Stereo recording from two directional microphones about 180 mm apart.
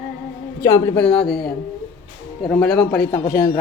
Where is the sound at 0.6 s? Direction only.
15° left (ahead or behind).